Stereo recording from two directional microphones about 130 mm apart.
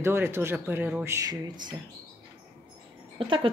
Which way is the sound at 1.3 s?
35° right (ahead or behind).